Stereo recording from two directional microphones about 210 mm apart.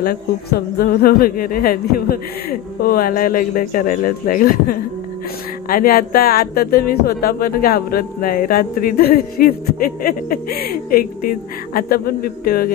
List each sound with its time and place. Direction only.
0.0 s speech: 45° left (ahead or behind)